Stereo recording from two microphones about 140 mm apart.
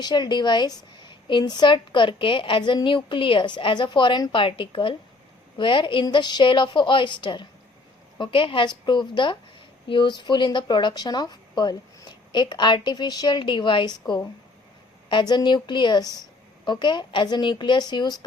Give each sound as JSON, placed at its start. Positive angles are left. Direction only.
{"t": 0.0, "sound": "a woman's voice", "side_deg": 30}
{"t": 15.1, "sound": "a woman's voice", "side_deg": 30}